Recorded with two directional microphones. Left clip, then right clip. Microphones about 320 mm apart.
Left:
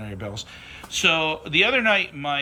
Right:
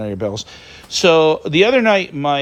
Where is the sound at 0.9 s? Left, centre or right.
Centre.